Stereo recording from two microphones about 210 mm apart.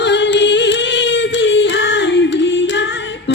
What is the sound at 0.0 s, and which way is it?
Singing, 55° left (ahead or behind).